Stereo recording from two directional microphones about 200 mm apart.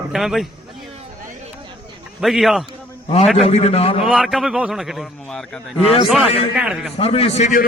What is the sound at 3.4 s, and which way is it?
Speech, 30° left (ahead or behind).